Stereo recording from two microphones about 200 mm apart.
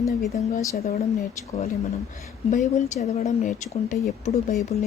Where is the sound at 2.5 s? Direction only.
35° left (ahead or behind).